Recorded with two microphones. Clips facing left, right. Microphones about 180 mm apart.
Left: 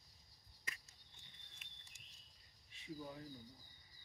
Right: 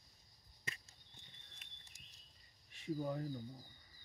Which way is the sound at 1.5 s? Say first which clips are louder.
Right 1 dB; 40° right (ahead or behind).